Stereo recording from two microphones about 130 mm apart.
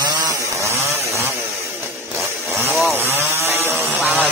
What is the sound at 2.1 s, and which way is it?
Chainsaw, 20° right (ahead or behind).